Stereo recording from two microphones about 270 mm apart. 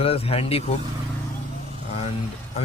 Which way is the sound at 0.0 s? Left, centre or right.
Left.